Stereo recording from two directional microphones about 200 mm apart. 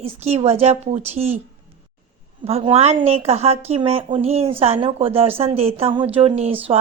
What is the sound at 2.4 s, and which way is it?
A woman's voice, 25° right (ahead or behind).